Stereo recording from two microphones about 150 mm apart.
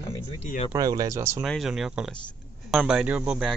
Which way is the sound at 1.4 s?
Centre (ahead or behind).